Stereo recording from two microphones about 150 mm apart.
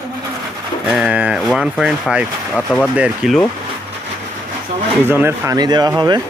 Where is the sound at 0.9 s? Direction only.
5° right (ahead or behind).